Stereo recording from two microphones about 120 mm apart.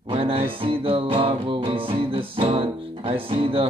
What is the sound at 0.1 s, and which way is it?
Music, 50° right (ahead or behind).